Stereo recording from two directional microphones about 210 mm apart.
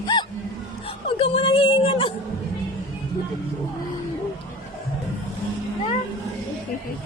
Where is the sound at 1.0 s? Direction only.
25° left (ahead or behind).